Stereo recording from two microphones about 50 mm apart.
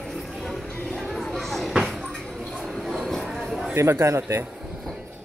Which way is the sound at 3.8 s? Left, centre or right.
Right.